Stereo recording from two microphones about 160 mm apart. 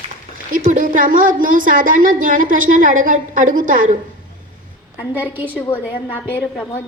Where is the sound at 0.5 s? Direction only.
55° right (ahead or behind).